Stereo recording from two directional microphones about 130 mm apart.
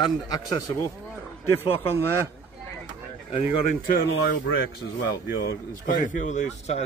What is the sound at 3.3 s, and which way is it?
Speech, 45° left (ahead or behind).